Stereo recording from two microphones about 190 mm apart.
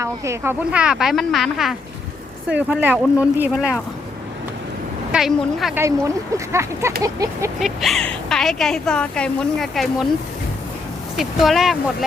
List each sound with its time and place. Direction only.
0.0 s a woman's voice: 15° right (ahead or behind)
5.1 s a woman's voice: centre (ahead or behind)
5.7 s speech: 15° right (ahead or behind)
7.6 s a woman's voice: centre (ahead or behind)
11.2 s a woman's voice: centre (ahead or behind)